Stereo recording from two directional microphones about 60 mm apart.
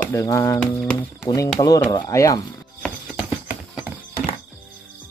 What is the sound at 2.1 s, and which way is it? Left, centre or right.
Speech, left.